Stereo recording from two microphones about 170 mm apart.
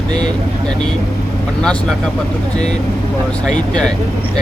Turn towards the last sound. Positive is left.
turn(degrees=5)  # may be behind; listen again after turning